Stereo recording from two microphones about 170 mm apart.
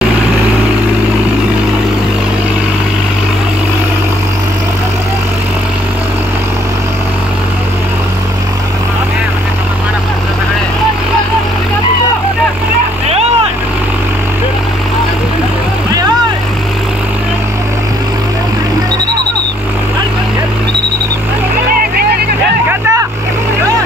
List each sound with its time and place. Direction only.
22.7 s vehicle: 20° right (ahead or behind)